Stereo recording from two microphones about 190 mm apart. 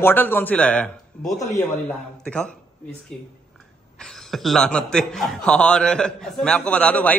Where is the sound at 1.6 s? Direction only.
5° left (ahead or behind).